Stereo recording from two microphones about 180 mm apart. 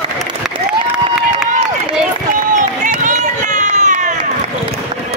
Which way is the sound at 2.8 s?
40° right (ahead or behind).